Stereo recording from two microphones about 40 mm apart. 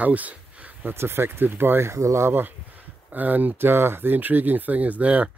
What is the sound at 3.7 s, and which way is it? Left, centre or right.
Speech, right.